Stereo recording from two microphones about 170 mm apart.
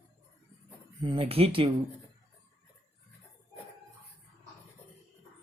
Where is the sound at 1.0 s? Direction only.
30° right (ahead or behind).